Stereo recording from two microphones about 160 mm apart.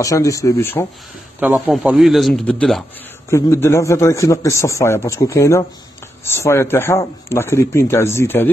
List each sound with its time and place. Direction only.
0.0 s speech: 20° left (ahead or behind)
1.7 s speech: 5° right (ahead or behind)
3.3 s a man's voice: 15° left (ahead or behind)